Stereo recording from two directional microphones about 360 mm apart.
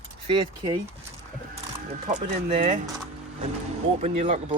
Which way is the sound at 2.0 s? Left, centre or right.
Centre.